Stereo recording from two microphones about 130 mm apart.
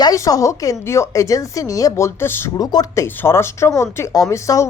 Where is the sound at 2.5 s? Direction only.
30° left (ahead or behind).